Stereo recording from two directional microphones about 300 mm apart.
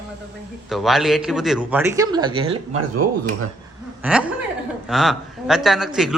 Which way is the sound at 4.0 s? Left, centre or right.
Centre.